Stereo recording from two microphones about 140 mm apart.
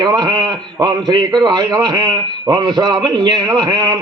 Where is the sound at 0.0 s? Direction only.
30° right (ahead or behind).